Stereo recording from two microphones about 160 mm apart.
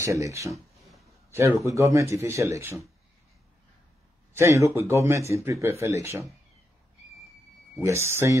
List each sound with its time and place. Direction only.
0.0 s speech: 20° right (ahead or behind)
4.3 s a man's voice: 15° right (ahead or behind)
7.8 s speech: 15° right (ahead or behind)